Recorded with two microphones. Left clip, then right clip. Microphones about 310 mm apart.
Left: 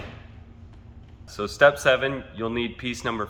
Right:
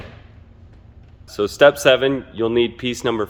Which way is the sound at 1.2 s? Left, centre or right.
Right.